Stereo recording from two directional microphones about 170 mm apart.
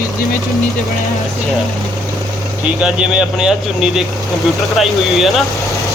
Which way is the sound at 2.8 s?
5° right (ahead or behind).